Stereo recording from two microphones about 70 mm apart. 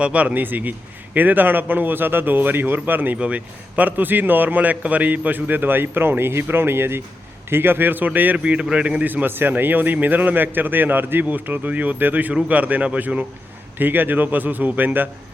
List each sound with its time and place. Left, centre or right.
0.0 s a man's voice: centre
8.5 s speech: centre
9.0 s a man's voice: right